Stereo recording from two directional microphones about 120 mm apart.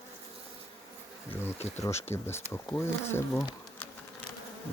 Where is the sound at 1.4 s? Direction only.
20° left (ahead or behind).